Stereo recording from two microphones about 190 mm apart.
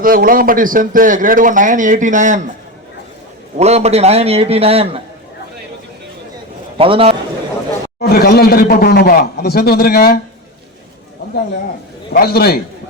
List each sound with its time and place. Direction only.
0.0 s a man's voice: 50° right (ahead or behind)
3.6 s a man's voice: 35° right (ahead or behind)
6.7 s a man's voice: 30° right (ahead or behind)
8.1 s a man's voice: 55° left (ahead or behind)
12.1 s a man's voice: 55° left (ahead or behind)